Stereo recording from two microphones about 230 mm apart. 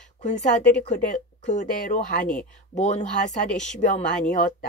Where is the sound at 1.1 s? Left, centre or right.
Left.